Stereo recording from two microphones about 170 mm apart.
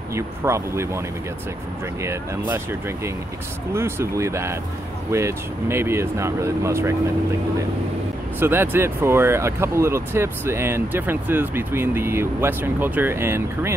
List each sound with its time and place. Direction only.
0.1 s speech: 15° right (ahead or behind)
3.7 s speech: 15° right (ahead or behind)
8.4 s speech: 15° right (ahead or behind)